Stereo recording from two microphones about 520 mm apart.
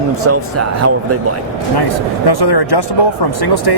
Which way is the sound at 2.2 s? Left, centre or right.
Left.